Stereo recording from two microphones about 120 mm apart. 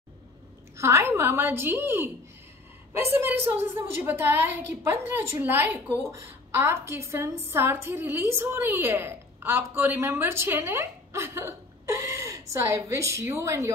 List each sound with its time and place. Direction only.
0.7 s a woman's voice: 25° right (ahead or behind)